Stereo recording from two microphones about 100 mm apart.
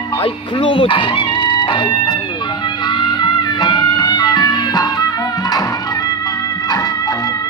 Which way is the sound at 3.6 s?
45° left (ahead or behind).